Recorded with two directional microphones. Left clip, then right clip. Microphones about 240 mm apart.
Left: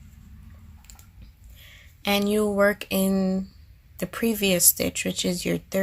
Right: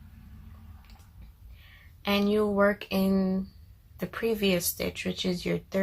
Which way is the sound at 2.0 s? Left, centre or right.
Left.